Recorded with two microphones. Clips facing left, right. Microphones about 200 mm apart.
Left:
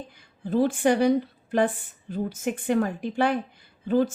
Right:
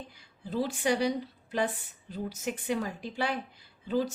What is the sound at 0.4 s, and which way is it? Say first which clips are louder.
A woman's voice: left 8 dB; 50° left (ahead or behind).